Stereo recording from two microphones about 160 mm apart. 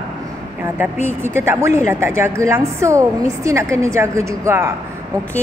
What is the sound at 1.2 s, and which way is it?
A woman's voice, 15° right (ahead or behind).